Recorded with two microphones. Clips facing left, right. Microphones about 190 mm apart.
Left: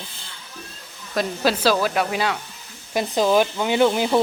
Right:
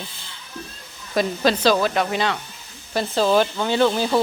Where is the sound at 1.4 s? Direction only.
5° left (ahead or behind).